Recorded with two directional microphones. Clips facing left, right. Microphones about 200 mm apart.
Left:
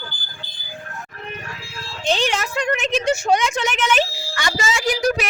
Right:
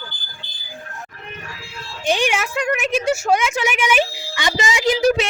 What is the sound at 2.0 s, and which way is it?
A woman's voice, 10° right (ahead or behind).